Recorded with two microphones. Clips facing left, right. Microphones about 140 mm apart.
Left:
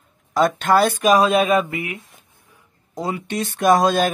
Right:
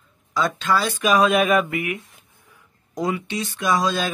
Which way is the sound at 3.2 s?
50° left (ahead or behind).